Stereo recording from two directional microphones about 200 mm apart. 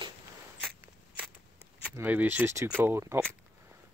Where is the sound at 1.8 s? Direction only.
10° right (ahead or behind).